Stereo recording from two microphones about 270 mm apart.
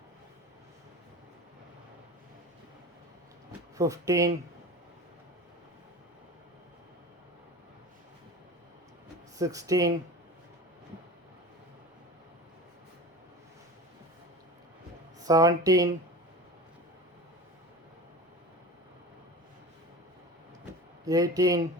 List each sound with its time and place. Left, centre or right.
3.8 s speech: centre
9.4 s speech: centre
15.2 s speech: centre
21.0 s speech: centre